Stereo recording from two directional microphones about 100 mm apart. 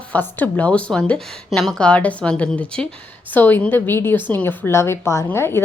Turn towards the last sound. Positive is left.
turn(degrees=25)  # may be behind; listen again after turning